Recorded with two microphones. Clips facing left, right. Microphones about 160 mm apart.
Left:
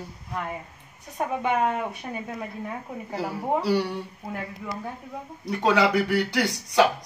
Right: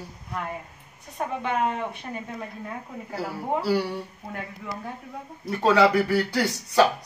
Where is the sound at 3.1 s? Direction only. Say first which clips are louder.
Left 2 dB; 15° left (ahead or behind).